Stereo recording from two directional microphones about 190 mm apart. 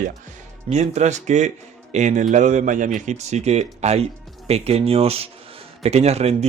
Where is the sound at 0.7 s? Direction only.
35° right (ahead or behind).